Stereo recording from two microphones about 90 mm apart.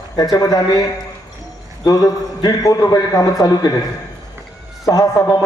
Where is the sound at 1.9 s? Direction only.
40° left (ahead or behind).